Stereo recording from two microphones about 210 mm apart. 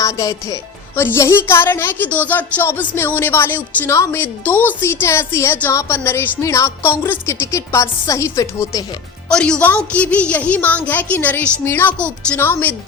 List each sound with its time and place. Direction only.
0.0 s speech: 15° left (ahead or behind)
9.3 s speech: 5° left (ahead or behind)